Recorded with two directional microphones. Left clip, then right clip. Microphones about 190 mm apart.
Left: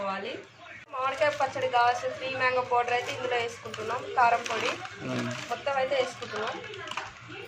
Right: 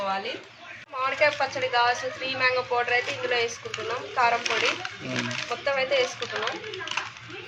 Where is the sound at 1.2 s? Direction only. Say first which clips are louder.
Right 3 dB; 25° right (ahead or behind).